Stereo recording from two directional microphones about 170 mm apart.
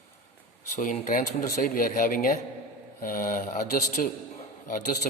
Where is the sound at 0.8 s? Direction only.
50° left (ahead or behind).